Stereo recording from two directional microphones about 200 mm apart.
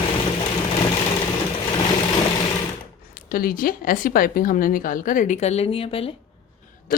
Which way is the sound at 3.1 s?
45° left (ahead or behind).